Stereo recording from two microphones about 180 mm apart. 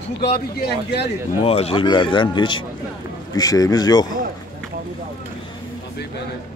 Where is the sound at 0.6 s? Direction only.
70° left (ahead or behind).